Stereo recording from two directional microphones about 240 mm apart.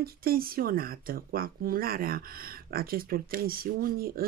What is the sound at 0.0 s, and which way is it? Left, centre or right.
Speech, right.